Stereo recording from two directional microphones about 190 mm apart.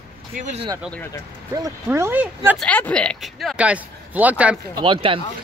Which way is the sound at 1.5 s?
15° right (ahead or behind).